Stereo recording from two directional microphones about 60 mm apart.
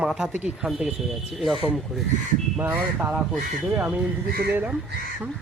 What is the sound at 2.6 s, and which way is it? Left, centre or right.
Speech, right.